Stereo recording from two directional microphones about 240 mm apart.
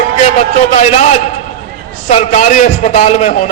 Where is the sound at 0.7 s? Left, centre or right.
Left.